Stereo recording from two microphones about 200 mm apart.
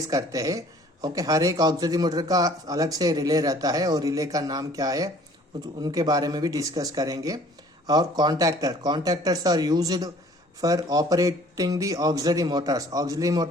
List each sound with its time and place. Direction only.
0.1 s speech: 15° right (ahead or behind)